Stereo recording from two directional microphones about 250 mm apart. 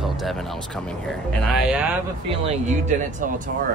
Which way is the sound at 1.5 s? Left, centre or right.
Centre.